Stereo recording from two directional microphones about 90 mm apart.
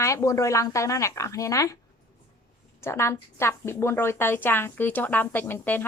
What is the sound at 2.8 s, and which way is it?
A woman's voice, 30° left (ahead or behind).